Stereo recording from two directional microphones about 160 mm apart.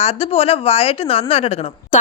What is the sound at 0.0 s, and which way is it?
A woman's voice, 40° left (ahead or behind).